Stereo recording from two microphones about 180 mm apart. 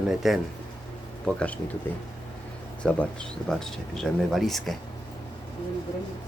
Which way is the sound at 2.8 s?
5° left (ahead or behind).